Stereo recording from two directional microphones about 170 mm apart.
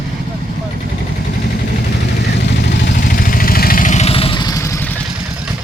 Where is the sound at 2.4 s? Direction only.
90° left.